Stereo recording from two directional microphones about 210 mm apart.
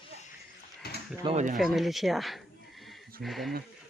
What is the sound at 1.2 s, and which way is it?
Speech, 35° right (ahead or behind).